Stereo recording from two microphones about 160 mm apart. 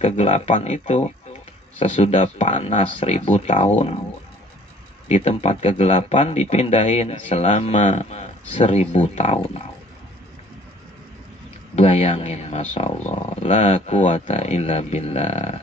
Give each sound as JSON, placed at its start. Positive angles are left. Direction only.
{"t": 0.0, "sound": "speech", "side_deg": 45}
{"t": 5.0, "sound": "speech", "side_deg": 40}
{"t": 11.7, "sound": "speech", "side_deg": 40}